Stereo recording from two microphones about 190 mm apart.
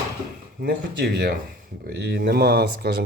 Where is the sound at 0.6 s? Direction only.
55° right (ahead or behind).